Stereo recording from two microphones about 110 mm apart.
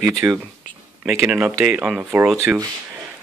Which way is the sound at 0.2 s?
20° right (ahead or behind).